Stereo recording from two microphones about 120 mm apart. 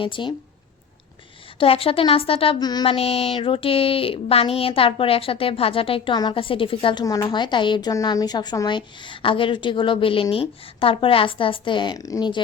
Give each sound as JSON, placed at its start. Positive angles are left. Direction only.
{"t": 0.0, "sound": "speech", "side_deg": 45}
{"t": 1.5, "sound": "speech", "side_deg": 50}
{"t": 2.6, "sound": "a woman's voice", "side_deg": 35}
{"t": 2.8, "sound": "speech", "side_deg": 55}
{"t": 7.0, "sound": "a woman's voice", "side_deg": 30}